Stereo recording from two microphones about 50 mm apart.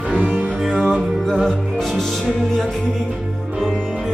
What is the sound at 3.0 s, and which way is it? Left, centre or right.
Music, centre.